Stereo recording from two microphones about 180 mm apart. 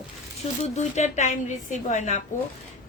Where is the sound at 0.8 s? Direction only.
40° left (ahead or behind).